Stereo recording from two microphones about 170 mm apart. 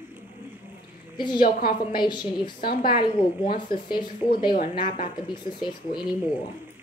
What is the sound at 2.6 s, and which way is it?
Speech, 60° left (ahead or behind).